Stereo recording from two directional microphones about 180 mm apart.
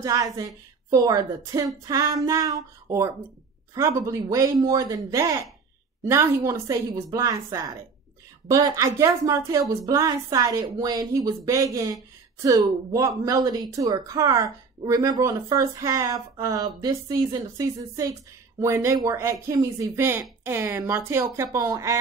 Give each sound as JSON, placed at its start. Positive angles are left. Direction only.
{"t": 0.0, "sound": "a woman's voice", "side_deg": -20}